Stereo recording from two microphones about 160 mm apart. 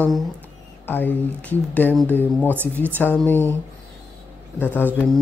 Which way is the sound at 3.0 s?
10° left (ahead or behind).